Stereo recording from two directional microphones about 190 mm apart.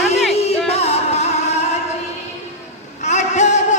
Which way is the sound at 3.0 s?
35° left (ahead or behind).